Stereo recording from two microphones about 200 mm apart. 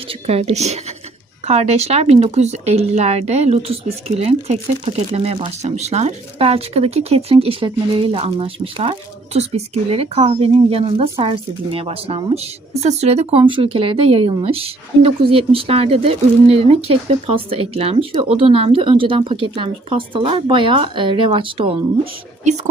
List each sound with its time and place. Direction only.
0.1 s a woman's voice: 30° right (ahead or behind)